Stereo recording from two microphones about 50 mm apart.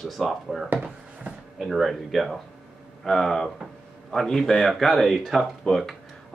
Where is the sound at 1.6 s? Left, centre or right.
Centre.